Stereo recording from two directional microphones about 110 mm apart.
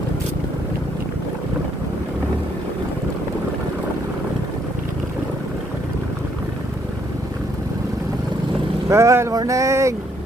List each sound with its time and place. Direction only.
8.9 s vehicle: 25° right (ahead or behind)
9.4 s speech: 30° right (ahead or behind)